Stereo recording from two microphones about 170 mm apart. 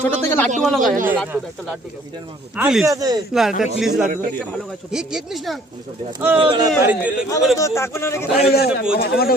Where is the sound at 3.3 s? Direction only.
5° right (ahead or behind).